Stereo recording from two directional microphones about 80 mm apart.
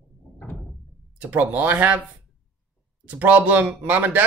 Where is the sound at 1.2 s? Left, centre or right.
Right.